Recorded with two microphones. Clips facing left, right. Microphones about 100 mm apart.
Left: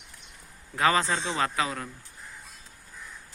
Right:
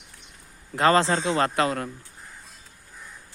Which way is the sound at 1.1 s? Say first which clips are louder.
Right 5 dB; 45° right (ahead or behind).